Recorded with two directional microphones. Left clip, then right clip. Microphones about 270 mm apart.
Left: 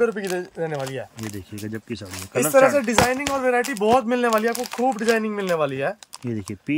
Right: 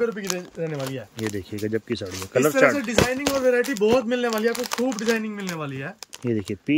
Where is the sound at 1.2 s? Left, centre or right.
Centre.